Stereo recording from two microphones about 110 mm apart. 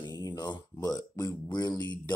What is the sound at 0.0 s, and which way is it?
Speech, 35° left (ahead or behind).